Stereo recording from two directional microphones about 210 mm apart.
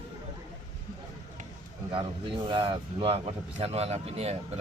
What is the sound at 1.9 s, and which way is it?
Speech, 25° right (ahead or behind).